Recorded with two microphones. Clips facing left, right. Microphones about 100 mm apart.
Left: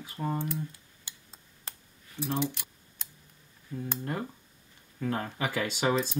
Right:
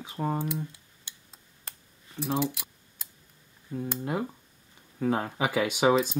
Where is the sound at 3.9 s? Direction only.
10° right (ahead or behind).